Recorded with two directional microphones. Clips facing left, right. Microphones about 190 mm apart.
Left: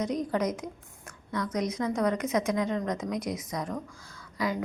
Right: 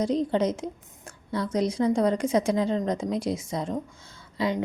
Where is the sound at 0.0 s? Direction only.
30° right (ahead or behind).